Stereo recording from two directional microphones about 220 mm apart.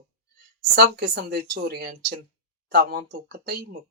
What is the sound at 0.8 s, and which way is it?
Speech, 45° right (ahead or behind).